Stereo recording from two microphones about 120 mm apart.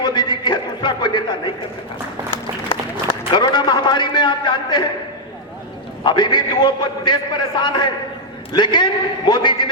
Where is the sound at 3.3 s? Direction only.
40° left (ahead or behind).